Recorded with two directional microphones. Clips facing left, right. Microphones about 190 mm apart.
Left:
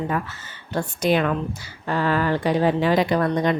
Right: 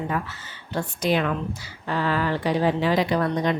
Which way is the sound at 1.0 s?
50° left (ahead or behind).